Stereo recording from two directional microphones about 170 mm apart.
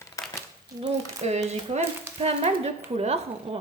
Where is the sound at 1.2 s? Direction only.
40° right (ahead or behind).